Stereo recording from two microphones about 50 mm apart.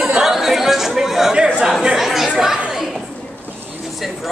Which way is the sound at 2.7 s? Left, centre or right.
Centre.